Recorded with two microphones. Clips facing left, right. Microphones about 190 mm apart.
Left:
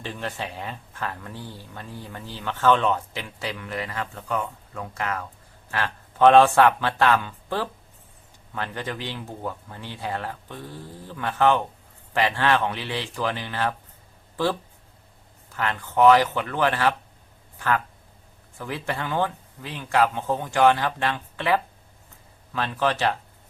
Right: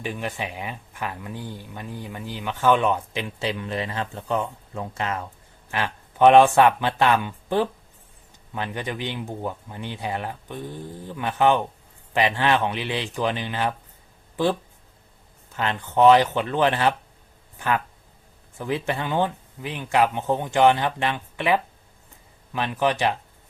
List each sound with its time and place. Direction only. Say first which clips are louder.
0.0 s speech: right 2 dB; 15° right (ahead or behind)
15.5 s speech: right 1 dB; 20° right (ahead or behind)